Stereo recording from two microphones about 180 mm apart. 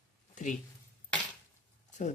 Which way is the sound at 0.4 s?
45° left (ahead or behind).